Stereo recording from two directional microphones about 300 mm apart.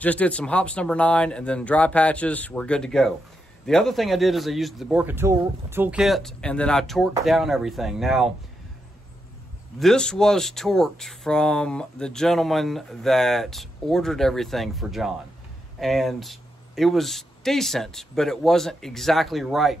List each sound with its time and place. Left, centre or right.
0.0 s speech: centre
9.8 s speech: centre